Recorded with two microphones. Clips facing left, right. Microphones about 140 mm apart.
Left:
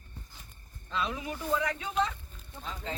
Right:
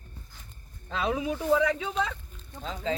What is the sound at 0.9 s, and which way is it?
Speech, 90° right.